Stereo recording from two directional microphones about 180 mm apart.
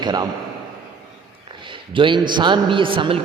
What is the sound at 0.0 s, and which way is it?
Speech, 25° right (ahead or behind).